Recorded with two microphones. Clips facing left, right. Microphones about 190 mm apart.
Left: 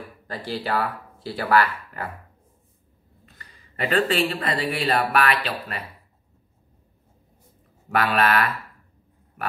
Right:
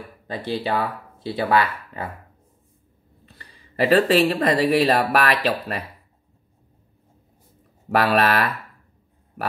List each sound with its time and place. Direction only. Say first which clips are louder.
0.3 s speech: right 3 dB; 20° right (ahead or behind)
3.3 s speech: right 8 dB; 35° right (ahead or behind)
7.9 s speech: right 3 dB; 40° right (ahead or behind)